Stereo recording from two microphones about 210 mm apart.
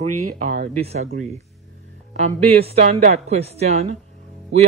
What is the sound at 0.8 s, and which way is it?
Speech, 30° right (ahead or behind).